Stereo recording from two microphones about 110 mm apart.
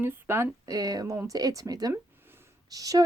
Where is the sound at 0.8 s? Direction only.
35° right (ahead or behind).